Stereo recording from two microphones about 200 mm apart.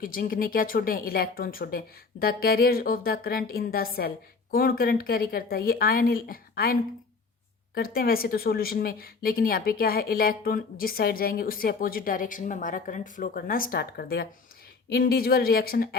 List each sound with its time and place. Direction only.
0.0 s a woman's voice: 45° left (ahead or behind)
7.8 s a woman's voice: 50° left (ahead or behind)